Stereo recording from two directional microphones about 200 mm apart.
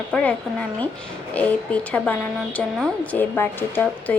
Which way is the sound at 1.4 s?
5° left (ahead or behind).